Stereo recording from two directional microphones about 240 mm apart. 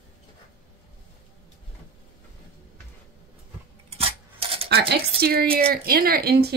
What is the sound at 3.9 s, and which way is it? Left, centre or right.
Rub, right.